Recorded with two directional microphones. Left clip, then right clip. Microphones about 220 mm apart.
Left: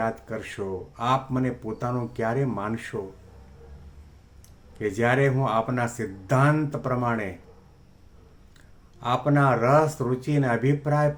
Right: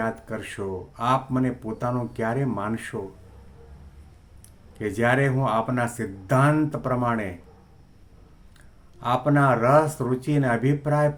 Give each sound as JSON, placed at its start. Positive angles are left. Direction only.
{"t": 0.0, "sound": "speech", "side_deg": -5}
{"t": 4.8, "sound": "speech", "side_deg": -5}
{"t": 9.0, "sound": "speech", "side_deg": -5}